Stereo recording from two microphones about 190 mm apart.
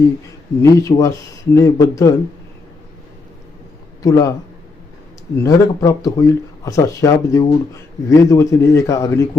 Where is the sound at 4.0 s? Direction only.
15° left (ahead or behind).